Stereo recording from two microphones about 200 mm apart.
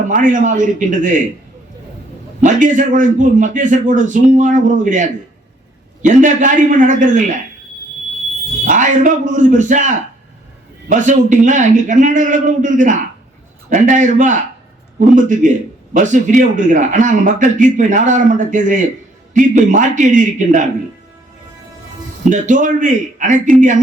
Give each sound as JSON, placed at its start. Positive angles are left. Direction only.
{"t": 0.1, "sound": "a man's voice", "side_deg": -40}
{"t": 2.4, "sound": "a man's voice", "side_deg": -40}
{"t": 8.6, "sound": "a man's voice", "side_deg": -40}
{"t": 22.3, "sound": "a man's voice", "side_deg": -40}